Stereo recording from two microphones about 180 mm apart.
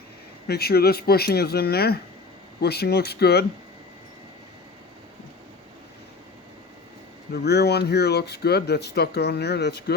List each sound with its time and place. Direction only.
0.4 s speech: 60° left (ahead or behind)
7.3 s speech: 65° left (ahead or behind)